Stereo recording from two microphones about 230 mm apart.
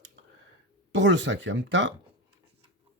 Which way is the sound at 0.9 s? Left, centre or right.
Right.